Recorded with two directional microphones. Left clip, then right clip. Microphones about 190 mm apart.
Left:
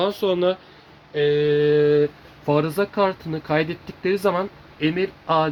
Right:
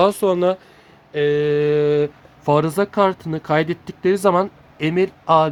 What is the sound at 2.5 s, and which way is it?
Speech, 35° right (ahead or behind).